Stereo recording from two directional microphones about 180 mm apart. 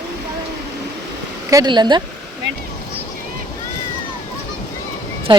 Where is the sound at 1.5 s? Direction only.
20° right (ahead or behind).